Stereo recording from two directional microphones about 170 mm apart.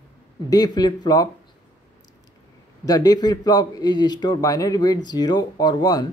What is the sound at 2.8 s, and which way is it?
A man's voice, 20° left (ahead or behind).